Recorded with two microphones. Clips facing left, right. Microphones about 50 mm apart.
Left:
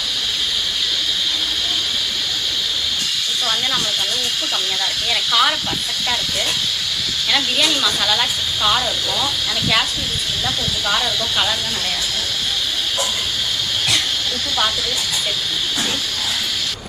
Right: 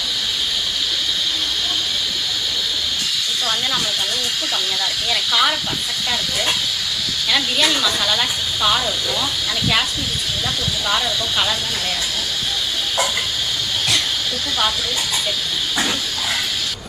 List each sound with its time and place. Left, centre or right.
5.3 s speech: centre
8.0 s speech: centre
10.8 s speech: centre